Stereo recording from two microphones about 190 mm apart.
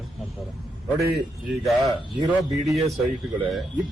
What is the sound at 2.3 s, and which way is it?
A man's voice, centre (ahead or behind).